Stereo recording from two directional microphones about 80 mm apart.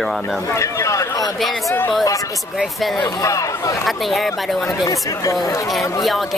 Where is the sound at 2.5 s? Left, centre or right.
Centre.